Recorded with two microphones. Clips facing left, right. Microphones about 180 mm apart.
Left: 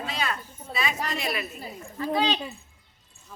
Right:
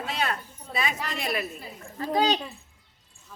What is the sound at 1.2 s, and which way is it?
A woman's voice, 50° right (ahead or behind).